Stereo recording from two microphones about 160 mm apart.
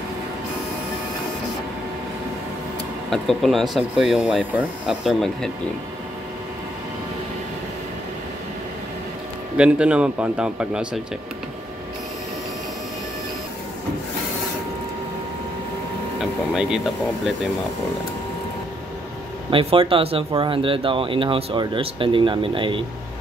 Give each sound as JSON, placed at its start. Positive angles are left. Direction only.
{"t": 3.1, "sound": "speech", "side_deg": 0}
{"t": 9.6, "sound": "a man's voice", "side_deg": -5}
{"t": 16.5, "sound": "speech", "side_deg": -5}
{"t": 19.5, "sound": "speech", "side_deg": -35}